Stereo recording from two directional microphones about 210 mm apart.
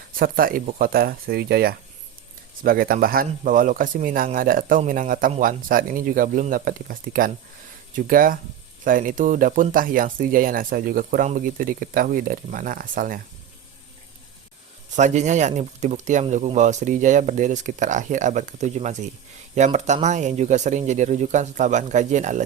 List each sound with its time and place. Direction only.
0.2 s speech: 45° right (ahead or behind)
14.9 s speech: 35° right (ahead or behind)